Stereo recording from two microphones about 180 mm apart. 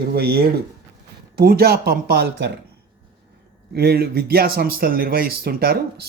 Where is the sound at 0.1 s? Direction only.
60° right (ahead or behind).